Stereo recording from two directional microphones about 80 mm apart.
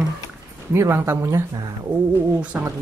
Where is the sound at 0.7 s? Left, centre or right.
Right.